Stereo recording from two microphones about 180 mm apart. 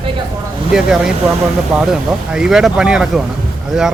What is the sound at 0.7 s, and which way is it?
Speech, 5° right (ahead or behind).